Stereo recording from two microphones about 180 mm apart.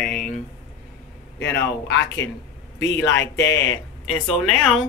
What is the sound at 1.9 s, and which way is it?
Speech, 75° left (ahead or behind).